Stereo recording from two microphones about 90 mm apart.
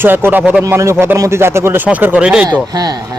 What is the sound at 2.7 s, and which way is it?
Speech, 45° right (ahead or behind).